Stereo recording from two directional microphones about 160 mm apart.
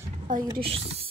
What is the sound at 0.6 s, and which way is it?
Speech, 35° right (ahead or behind).